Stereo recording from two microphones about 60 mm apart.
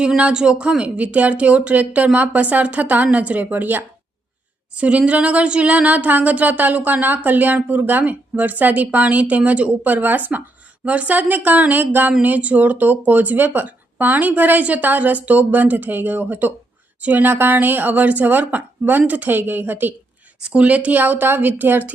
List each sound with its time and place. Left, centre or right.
0.2 s speech: centre
4.7 s a woman's voice: right
20.4 s a woman's voice: right